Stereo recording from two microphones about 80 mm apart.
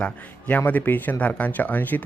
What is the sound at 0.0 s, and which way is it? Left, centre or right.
Speech, centre.